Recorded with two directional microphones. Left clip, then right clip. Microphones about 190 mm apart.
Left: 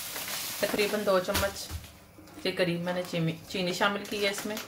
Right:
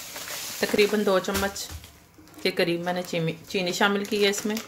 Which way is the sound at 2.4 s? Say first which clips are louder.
Right 5 dB; 45° right (ahead or behind).